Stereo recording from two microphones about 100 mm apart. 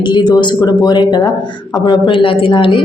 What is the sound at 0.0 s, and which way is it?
Speech, 45° left (ahead or behind).